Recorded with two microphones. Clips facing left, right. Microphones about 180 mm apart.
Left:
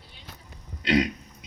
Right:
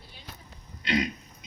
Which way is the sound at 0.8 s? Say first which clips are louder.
Left 5 dB; 80° left.